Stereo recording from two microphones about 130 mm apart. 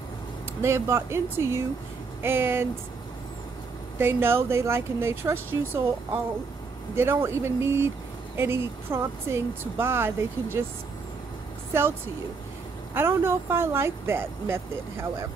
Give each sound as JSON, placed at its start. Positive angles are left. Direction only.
{"t": 0.6, "sound": "speech", "side_deg": -20}
{"t": 4.0, "sound": "speech", "side_deg": -15}
{"t": 7.0, "sound": "speech", "side_deg": -20}
{"t": 12.9, "sound": "speech", "side_deg": -20}